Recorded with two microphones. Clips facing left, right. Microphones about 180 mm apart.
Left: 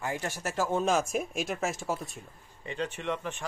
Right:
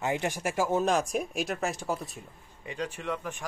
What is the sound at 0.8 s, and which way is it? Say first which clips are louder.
Speech: right 1 dB; centre (ahead or behind).